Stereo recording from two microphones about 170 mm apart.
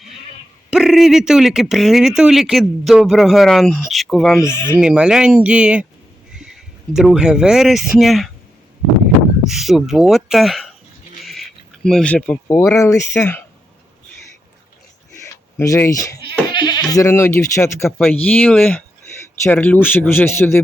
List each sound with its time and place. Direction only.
0.7 s a man's voice: centre (ahead or behind)
4.4 s speech: 15° left (ahead or behind)
4.8 s a man's voice: 5° right (ahead or behind)
9.4 s a man's voice: centre (ahead or behind); by 13.4 s 15° left (ahead or behind)
15.5 s speech: 15° left (ahead or behind)